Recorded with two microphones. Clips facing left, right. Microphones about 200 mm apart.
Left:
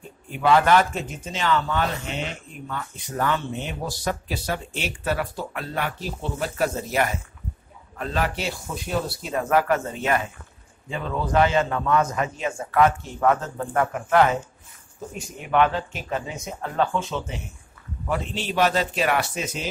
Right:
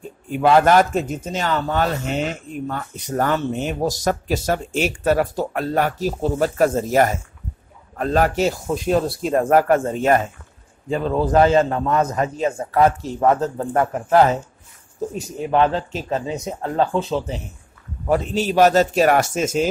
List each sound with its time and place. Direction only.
0.4 s a man's voice: 45° right (ahead or behind)